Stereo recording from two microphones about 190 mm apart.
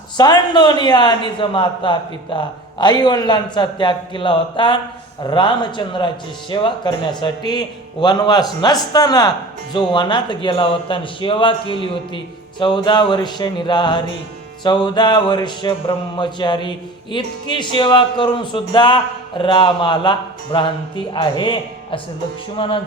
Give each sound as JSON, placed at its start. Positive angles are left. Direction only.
{"t": 0.2, "sound": "speech", "side_deg": 20}